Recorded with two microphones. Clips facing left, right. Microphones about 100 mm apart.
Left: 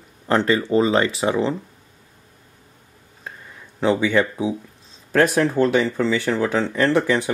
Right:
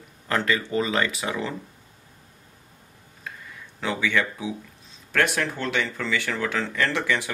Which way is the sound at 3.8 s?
30° left (ahead or behind).